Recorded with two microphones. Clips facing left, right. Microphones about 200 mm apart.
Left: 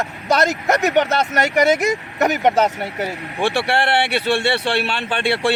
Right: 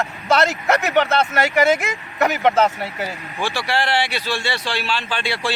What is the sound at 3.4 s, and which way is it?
Speech, 60° left (ahead or behind).